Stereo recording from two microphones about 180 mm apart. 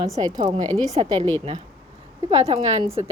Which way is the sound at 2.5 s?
40° right (ahead or behind).